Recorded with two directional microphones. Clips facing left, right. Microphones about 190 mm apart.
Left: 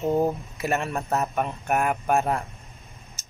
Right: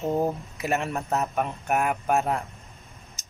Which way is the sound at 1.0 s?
5° right (ahead or behind).